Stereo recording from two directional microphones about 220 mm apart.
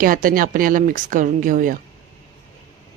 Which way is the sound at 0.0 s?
40° right (ahead or behind).